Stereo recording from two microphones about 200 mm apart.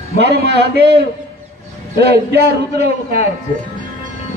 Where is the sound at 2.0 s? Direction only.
50° right (ahead or behind).